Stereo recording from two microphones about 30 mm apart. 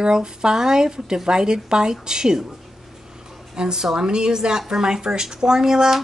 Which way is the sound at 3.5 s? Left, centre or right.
Right.